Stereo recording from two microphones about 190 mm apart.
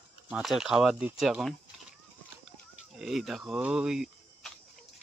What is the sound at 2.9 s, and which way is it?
Speech, centre (ahead or behind).